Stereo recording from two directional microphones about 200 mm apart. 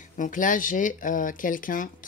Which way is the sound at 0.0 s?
40° left (ahead or behind).